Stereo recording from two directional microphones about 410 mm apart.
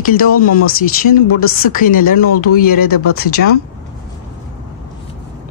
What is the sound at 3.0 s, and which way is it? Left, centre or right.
Speech, left.